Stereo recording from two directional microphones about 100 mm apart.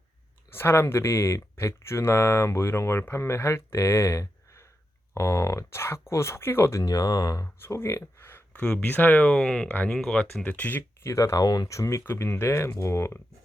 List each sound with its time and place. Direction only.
0.5 s speech: 25° left (ahead or behind)
7.7 s a sound: 30° left (ahead or behind)
8.6 s speech: 15° left (ahead or behind)
9.3 s speech: 5° left (ahead or behind)
9.6 s speech: 20° left (ahead or behind)
9.9 s speech: 5° left (ahead or behind)
10.4 s speech: 15° left (ahead or behind)